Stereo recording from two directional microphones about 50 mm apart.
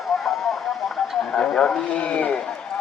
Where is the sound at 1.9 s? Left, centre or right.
Left.